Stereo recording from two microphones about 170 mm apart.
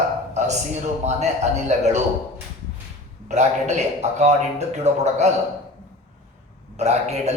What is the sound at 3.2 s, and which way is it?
A man's voice, 40° right (ahead or behind).